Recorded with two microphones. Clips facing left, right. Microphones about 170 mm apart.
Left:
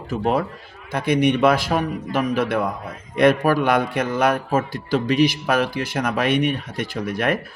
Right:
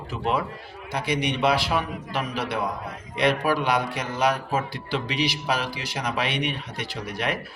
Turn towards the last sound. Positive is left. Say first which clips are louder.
# left 6 dB
turn(degrees=50)  # may be behind; listen again after turning